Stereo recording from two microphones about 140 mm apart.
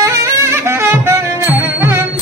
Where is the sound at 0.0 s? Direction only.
20° right (ahead or behind).